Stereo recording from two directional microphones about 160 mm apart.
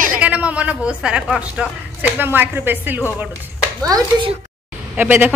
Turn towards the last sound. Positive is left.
turn(degrees=-10)  # may be behind; listen again after turning